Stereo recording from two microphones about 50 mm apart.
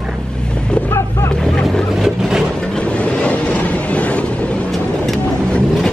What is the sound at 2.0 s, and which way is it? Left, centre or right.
Vehicle, centre.